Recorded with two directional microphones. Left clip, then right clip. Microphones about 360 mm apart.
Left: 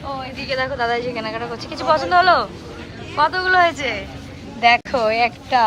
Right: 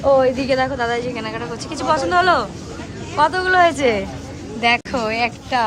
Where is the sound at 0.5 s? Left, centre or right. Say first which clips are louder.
Right 1 dB; centre.